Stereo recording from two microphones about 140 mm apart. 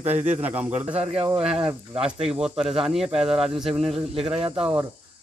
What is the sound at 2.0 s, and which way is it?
Speech, 5° right (ahead or behind).